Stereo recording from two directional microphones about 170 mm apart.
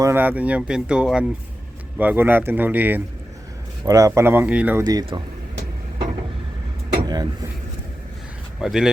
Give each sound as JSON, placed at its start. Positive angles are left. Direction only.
{"t": 0.0, "sound": "speech", "side_deg": -10}
{"t": 4.8, "sound": "speech", "side_deg": -25}
{"t": 6.9, "sound": "vehicle", "side_deg": -25}
{"t": 8.5, "sound": "speech", "side_deg": -5}